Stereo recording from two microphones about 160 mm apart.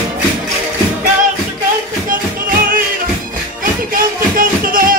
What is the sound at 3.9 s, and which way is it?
Music, 60° right (ahead or behind).